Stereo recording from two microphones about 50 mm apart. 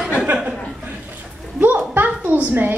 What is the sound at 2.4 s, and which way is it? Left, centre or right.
Speech, right.